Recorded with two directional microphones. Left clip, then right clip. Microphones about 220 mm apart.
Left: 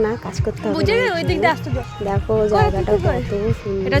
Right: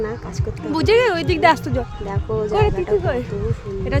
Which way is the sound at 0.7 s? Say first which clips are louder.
Right 3 dB; 25° right (ahead or behind).